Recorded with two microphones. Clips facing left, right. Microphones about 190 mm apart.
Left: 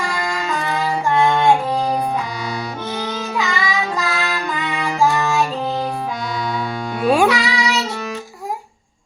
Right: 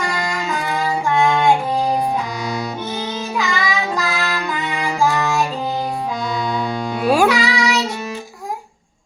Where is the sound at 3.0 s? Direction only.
20° right (ahead or behind).